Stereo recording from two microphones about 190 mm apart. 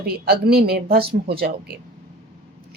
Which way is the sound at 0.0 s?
55° right (ahead or behind).